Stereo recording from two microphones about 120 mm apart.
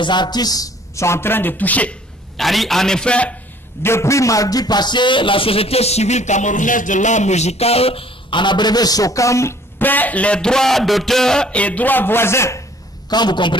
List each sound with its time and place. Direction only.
0.0 s a man's voice: 40° left (ahead or behind); by 2.0 s 10° left (ahead or behind)
2.3 s a man's voice: centre (ahead or behind)
3.8 s a man's voice: 20° left (ahead or behind)
13.1 s a man's voice: 35° left (ahead or behind)